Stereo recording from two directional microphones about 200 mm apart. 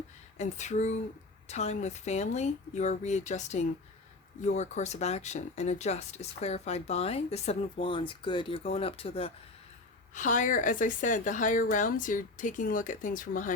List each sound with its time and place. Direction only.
0.3 s speech: 35° left (ahead or behind)
10.2 s speech: 40° left (ahead or behind)